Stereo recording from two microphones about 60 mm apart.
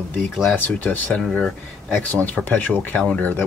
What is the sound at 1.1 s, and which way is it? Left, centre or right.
Speech, centre.